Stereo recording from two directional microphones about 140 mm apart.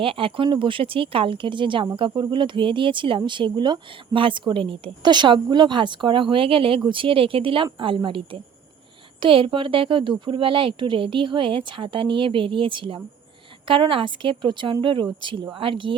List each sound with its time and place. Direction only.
0.0 s speech: 40° right (ahead or behind)